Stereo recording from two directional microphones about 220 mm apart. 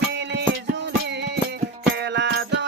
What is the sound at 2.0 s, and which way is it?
Music, 50° right (ahead or behind).